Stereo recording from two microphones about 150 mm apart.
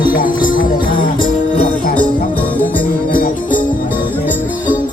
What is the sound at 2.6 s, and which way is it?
Music, 65° left (ahead or behind).